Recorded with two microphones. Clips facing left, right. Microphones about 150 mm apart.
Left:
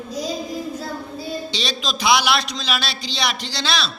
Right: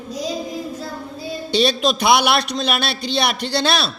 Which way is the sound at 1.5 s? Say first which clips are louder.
Right 9 dB; 55° right (ahead or behind).